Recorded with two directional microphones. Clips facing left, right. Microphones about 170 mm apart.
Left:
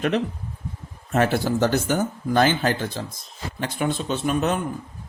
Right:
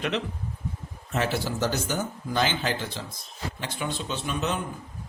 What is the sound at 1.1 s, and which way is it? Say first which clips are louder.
A man's voice: left 7 dB; 50° left (ahead or behind).